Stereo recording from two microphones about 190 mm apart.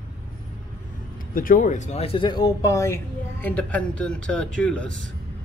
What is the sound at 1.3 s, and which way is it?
Speech, 45° left (ahead or behind).